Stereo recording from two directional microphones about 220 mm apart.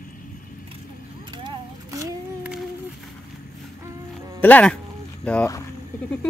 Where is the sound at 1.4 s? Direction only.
15° right (ahead or behind).